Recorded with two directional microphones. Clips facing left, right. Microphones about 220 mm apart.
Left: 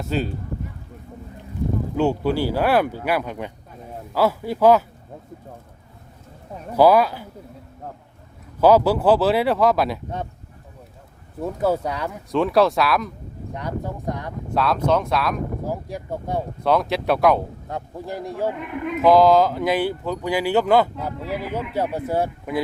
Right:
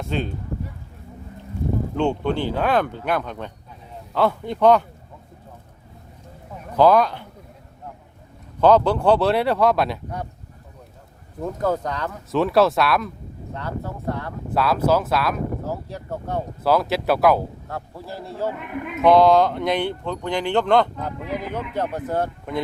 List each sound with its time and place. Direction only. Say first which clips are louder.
0.0 s speech: left 2 dB; 5° left (ahead or behind)
2.0 s speech: left 2 dB; 5° left (ahead or behind)
6.7 s speech: left 1 dB; 10° left (ahead or behind)
8.6 s speech: left 1 dB; 5° left (ahead or behind)
11.3 s speech: left 2 dB; 5° left (ahead or behind)
12.3 s speech: even; centre (ahead or behind)
13.5 s speech: left 2 dB; 15° left (ahead or behind)
14.5 s speech: right 1 dB; 5° right (ahead or behind)
15.6 s speech: left 2 dB; 10° left (ahead or behind)
16.6 s speech: even; centre (ahead or behind)
17.7 s speech: left 3 dB; 20° left (ahead or behind)
19.0 s speech: even; centre (ahead or behind)